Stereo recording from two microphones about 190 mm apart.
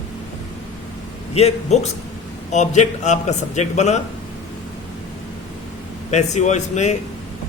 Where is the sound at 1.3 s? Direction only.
35° left (ahead or behind).